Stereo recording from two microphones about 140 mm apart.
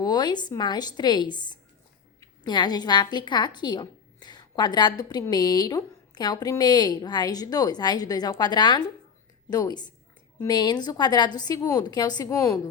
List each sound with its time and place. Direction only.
0.0 s a woman's voice: 30° left (ahead or behind)